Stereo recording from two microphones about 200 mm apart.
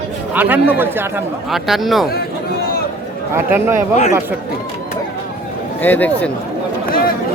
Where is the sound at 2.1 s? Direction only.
50° left (ahead or behind).